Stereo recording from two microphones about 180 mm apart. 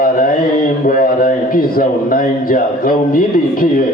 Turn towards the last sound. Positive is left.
turn(degrees=55)  # may be behind; listen again after turning